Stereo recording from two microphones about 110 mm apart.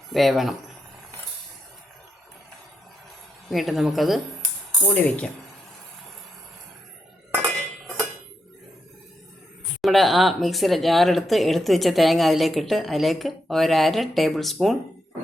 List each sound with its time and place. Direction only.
0.1 s speech: centre (ahead or behind)
3.5 s speech: centre (ahead or behind)
4.9 s speech: 15° left (ahead or behind)
7.3 s cutlery: 20° right (ahead or behind)
9.8 s speech: centre (ahead or behind)